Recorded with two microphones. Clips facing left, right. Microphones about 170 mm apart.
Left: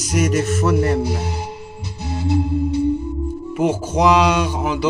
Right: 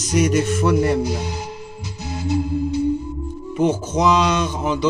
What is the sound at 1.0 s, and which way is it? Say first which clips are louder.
Music: left 1 dB; 60° left (ahead or behind).